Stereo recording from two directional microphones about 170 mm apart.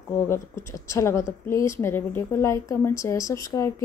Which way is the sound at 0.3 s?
15° left (ahead or behind).